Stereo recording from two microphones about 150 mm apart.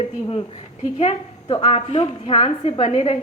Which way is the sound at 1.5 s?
40° left (ahead or behind).